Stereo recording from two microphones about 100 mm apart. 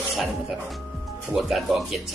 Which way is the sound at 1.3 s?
Centre (ahead or behind).